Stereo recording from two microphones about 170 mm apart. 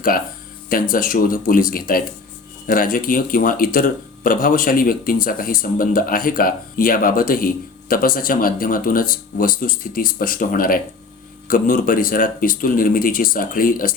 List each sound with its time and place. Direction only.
0.7 s speech: 55° left (ahead or behind)